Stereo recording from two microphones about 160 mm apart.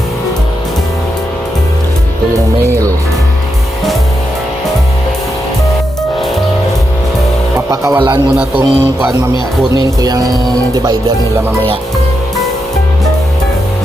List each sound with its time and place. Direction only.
2.6 s speech: 20° right (ahead or behind)
7.7 s speech: 20° right (ahead or behind)
8.4 s speech: 10° right (ahead or behind)
9.7 s speech: 25° right (ahead or behind)